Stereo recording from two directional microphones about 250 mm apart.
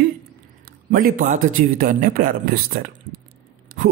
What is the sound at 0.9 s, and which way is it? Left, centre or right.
A man's voice, right.